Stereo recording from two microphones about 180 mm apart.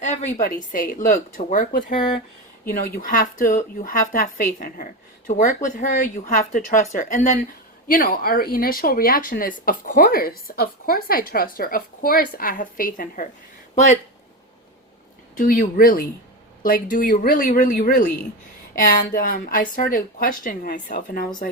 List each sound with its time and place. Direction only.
0.0 s a woman's voice: 40° left (ahead or behind)
7.9 s speech: 55° left (ahead or behind)
13.7 s speech: 40° left (ahead or behind)
15.4 s speech: 45° left (ahead or behind)